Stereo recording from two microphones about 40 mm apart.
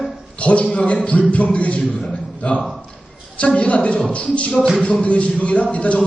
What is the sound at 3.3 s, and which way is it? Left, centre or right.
A man's voice, left.